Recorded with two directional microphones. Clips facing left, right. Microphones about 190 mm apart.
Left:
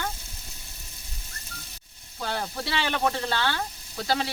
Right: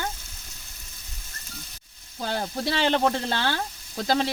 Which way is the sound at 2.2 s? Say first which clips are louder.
Right 3 dB; 40° right (ahead or behind).